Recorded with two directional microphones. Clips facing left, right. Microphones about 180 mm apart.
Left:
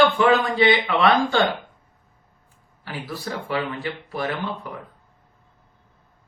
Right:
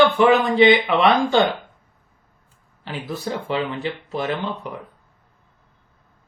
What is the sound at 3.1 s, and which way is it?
Speech, 20° right (ahead or behind).